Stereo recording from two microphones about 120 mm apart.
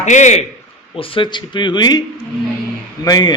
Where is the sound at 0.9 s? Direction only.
50° left (ahead or behind).